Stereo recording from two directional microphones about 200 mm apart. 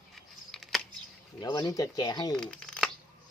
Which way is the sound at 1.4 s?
20° left (ahead or behind).